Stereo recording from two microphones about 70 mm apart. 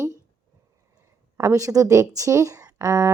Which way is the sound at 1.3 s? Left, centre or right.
Right.